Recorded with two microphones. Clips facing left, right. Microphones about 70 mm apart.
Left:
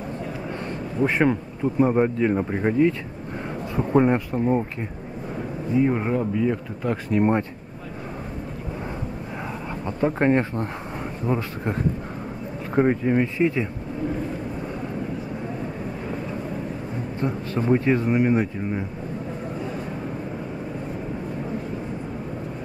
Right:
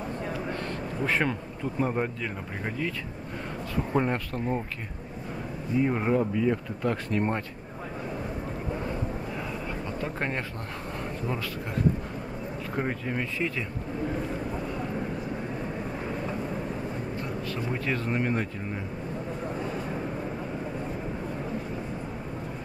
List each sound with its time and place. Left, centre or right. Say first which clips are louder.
1.0 s speech: left 7 dB; left
2.1 s speech: left 13 dB; left
3.9 s speech: left 9 dB; centre
5.8 s speech: left 3 dB; centre
9.8 s speech: left 13 dB; left
12.7 s speech: left 12 dB; left
17.2 s speech: left 7 dB; left; by 18.8 s centre